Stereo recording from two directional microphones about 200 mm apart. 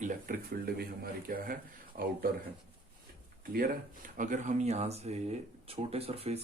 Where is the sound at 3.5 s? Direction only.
45° right (ahead or behind).